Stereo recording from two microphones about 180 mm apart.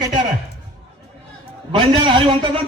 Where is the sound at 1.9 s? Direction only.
30° right (ahead or behind).